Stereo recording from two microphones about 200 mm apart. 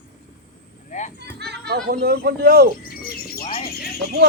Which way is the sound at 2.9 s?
50° left (ahead or behind).